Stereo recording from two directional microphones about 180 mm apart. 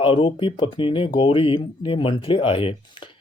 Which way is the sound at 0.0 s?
30° left (ahead or behind).